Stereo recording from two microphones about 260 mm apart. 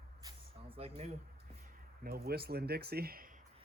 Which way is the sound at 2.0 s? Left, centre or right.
Right.